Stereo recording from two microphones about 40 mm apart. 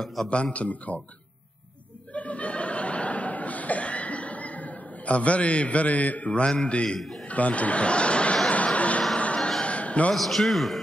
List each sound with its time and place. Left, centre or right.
0.0 s a man's voice: centre
0.3 s a man's voice: left
2.1 s chuckle: left
6.4 s a man's voice: left
7.0 s a man's voice: centre
7.2 s speech: left
8.5 s a sound: left
10.1 s a man's voice: centre